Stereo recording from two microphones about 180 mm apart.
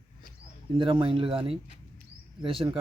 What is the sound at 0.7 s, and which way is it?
Speech, 30° right (ahead or behind).